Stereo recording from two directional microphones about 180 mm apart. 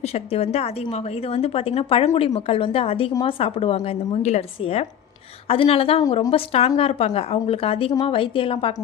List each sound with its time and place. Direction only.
0.0 s a woman's voice: 35° left (ahead or behind)